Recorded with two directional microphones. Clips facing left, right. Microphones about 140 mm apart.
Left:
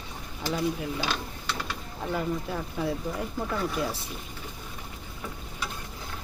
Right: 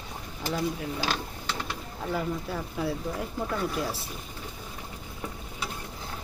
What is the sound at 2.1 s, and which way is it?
Speech, centre (ahead or behind).